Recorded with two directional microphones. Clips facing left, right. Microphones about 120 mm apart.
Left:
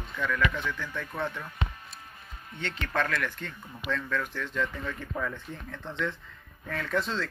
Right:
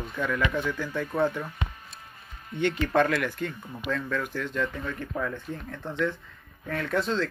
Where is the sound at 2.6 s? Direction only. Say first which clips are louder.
Right 8 dB; 15° right (ahead or behind).